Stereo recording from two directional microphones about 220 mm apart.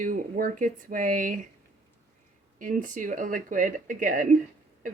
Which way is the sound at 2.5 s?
35° right (ahead or behind).